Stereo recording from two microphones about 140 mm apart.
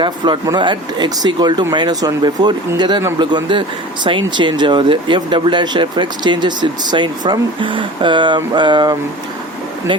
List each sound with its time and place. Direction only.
0.0 s speech: 30° right (ahead or behind)